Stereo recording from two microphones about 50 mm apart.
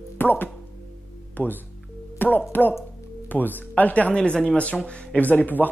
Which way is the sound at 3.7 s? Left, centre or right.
Left.